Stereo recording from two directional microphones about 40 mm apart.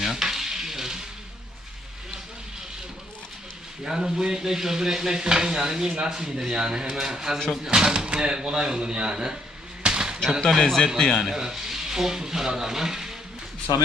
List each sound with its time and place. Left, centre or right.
0.0 s frying: centre
3.8 s stir: centre
7.7 s speech: centre
9.8 s basketball bounce: centre
10.6 s a man's voice: centre
11.3 s speech: centre